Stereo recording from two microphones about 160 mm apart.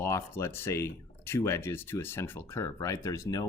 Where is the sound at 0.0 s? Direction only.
15° left (ahead or behind).